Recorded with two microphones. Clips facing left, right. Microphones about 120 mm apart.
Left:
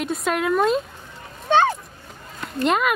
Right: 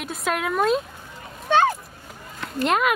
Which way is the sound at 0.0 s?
Centre (ahead or behind).